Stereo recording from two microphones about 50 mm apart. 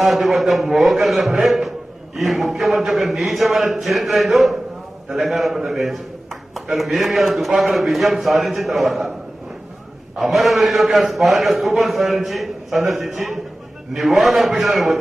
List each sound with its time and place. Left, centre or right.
0.0 s a man's voice: centre
10.1 s a man's voice: centre